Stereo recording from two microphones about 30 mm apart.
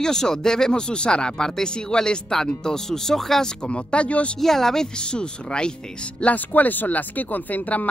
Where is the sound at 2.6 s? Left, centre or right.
Centre.